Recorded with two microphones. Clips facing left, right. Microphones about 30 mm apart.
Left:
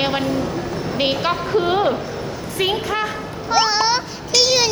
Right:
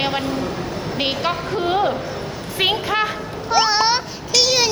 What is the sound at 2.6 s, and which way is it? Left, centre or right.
Speech, right.